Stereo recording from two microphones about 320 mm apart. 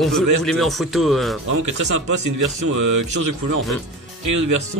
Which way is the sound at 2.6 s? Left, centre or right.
Right.